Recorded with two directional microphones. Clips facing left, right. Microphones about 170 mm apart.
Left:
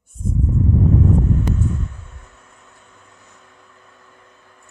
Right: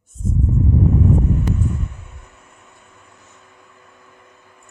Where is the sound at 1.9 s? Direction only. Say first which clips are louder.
Right 1 dB; 10° right (ahead or behind).